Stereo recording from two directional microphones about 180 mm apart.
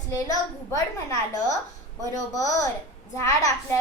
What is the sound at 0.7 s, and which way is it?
A woman's voice, 15° left (ahead or behind).